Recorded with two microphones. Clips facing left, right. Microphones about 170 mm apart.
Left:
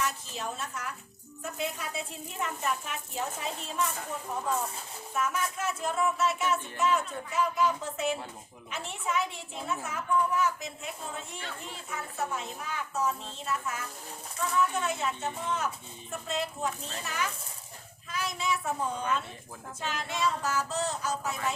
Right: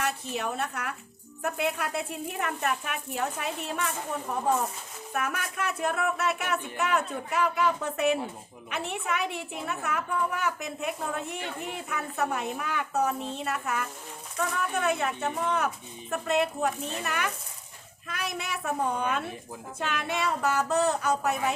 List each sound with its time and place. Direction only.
0.0 s a woman's voice: 65° right (ahead or behind)